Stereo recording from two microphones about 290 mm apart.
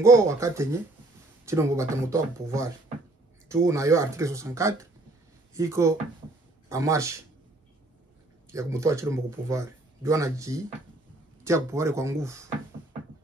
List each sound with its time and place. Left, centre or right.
0.0 s speech: centre
8.5 s speech: centre